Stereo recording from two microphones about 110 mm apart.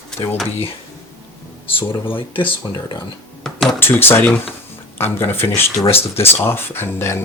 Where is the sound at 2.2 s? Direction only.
50° left (ahead or behind).